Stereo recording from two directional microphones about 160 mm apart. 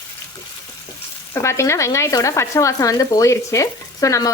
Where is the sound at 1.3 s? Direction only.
15° left (ahead or behind).